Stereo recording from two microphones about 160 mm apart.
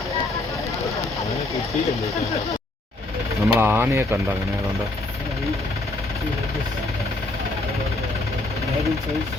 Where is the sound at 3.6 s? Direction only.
15° right (ahead or behind).